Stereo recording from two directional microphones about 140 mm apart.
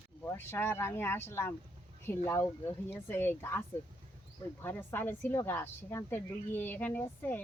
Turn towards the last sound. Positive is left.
turn(degrees=15)  # may be behind; listen again after turning